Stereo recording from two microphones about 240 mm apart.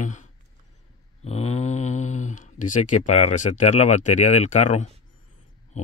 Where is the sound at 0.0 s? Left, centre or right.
Left.